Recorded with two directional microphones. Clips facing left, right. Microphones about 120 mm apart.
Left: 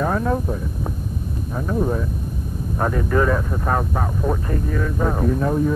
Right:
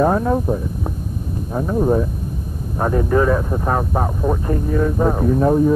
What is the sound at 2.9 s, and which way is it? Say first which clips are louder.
Speech: right 5 dB; 25° right (ahead or behind).